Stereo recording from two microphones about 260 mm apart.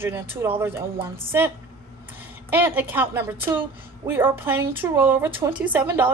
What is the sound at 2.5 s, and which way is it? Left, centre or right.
A woman's voice, centre.